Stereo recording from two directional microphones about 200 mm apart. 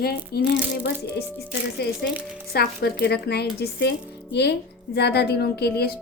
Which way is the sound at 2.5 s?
50° left (ahead or behind).